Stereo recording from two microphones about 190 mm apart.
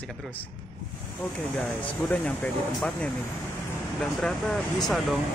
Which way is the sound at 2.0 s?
10° left (ahead or behind).